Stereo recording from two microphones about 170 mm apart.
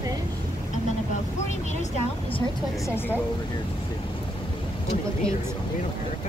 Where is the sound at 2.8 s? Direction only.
10° left (ahead or behind).